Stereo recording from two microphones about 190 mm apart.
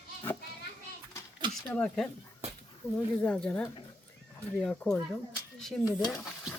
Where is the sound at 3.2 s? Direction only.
5° left (ahead or behind).